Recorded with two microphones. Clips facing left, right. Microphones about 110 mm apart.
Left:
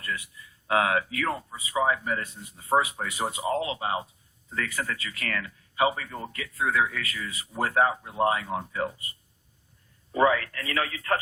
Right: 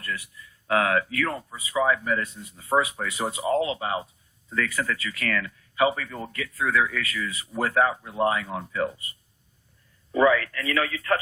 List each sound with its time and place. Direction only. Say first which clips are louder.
0.7 s speech: right 1 dB; 25° left (ahead or behind)
10.1 s a man's voice: right 2 dB; 35° left (ahead or behind)